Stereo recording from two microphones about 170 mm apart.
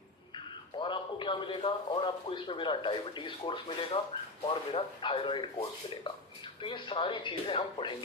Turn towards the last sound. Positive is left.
turn(degrees=30)  # may be behind; listen again after turning